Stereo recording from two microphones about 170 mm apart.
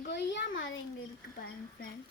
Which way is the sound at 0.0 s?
90° left.